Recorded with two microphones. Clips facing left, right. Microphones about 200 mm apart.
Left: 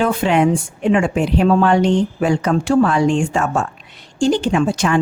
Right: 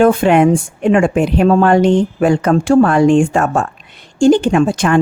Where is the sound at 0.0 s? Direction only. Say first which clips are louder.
Right 6 dB; 50° right (ahead or behind).